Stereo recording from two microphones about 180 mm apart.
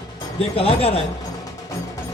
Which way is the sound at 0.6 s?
35° left (ahead or behind).